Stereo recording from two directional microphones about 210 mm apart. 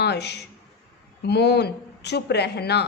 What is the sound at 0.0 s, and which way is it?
A man's voice, 50° left (ahead or behind).